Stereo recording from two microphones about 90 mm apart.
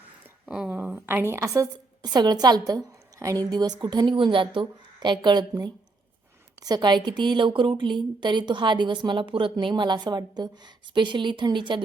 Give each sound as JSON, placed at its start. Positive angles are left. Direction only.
{"t": 0.4, "sound": "speech", "side_deg": -10}
{"t": 0.8, "sound": "a woman's voice", "side_deg": -20}
{"t": 2.1, "sound": "a woman's voice", "side_deg": -50}
{"t": 4.6, "sound": "a woman's voice", "side_deg": -55}